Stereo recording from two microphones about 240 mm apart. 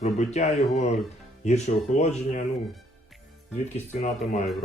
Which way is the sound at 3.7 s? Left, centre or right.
Left.